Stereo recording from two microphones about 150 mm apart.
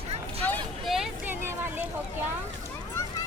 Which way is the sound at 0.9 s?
5° right (ahead or behind).